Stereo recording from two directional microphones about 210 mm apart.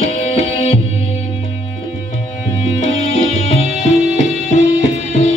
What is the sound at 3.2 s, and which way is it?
Music, 65° right (ahead or behind).